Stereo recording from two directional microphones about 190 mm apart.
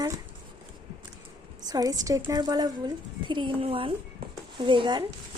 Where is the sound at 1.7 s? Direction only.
20° right (ahead or behind).